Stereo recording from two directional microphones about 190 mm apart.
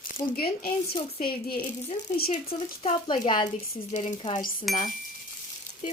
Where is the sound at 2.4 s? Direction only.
30° left (ahead or behind).